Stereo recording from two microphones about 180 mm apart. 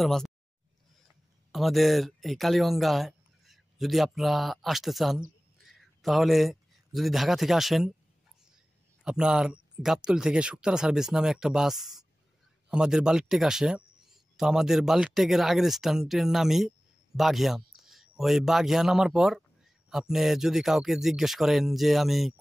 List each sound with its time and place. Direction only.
0.0 s speech: centre (ahead or behind)
1.5 s speech: centre (ahead or behind)
9.0 s speech: 5° right (ahead or behind)
17.2 s a sound: centre (ahead or behind)
18.2 s speech: centre (ahead or behind)